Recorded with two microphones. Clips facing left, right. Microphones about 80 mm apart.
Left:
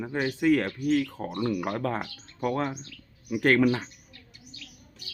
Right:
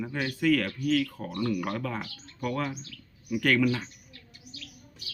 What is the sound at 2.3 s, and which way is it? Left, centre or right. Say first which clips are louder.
Speech: left 3 dB; left.